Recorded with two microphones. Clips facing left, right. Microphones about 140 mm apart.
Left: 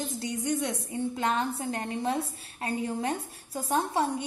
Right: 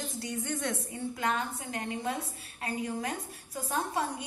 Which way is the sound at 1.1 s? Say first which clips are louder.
Left 2 dB; 25° left (ahead or behind).